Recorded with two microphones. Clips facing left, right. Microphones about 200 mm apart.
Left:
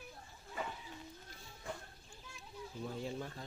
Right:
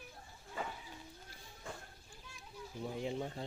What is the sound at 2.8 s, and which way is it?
Speech, 15° right (ahead or behind).